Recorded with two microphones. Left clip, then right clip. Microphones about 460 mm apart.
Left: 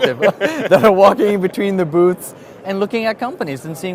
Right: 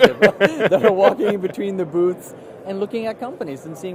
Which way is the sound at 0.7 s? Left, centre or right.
Left.